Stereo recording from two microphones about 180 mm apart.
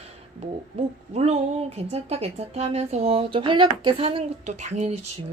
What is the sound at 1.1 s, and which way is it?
Speech, 35° right (ahead or behind).